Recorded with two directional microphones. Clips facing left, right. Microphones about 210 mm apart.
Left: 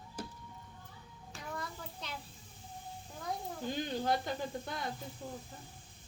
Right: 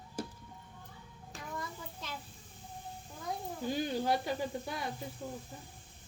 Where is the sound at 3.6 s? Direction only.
10° right (ahead or behind).